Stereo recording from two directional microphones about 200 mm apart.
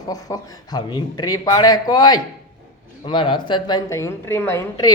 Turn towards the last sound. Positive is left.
turn(degrees=15)  # may be behind; listen again after turning